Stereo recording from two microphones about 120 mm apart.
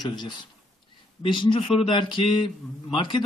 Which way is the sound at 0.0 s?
40° left (ahead or behind).